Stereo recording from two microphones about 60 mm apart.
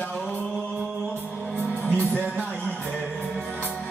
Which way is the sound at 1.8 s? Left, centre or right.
Left.